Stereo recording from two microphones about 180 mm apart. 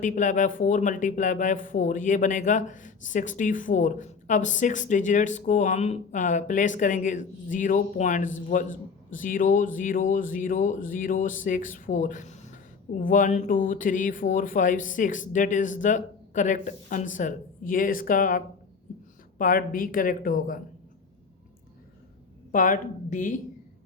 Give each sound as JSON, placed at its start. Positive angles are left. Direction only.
{"t": 0.0, "sound": "speech", "side_deg": 45}
{"t": 22.5, "sound": "speech", "side_deg": 50}